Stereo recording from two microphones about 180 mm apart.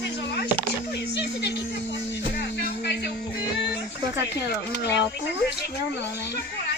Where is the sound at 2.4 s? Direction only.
70° left (ahead or behind).